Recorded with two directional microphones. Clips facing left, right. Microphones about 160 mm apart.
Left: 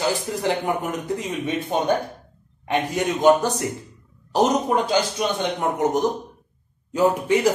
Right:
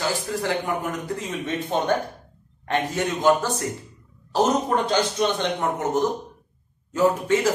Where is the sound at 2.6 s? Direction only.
15° left (ahead or behind).